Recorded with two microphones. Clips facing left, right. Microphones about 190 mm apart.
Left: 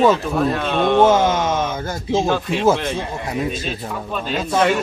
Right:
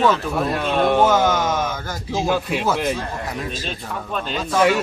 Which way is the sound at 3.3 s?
10° left (ahead or behind).